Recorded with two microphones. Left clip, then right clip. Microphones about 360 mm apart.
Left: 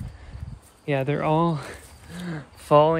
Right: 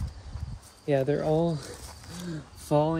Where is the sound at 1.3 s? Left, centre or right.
Left.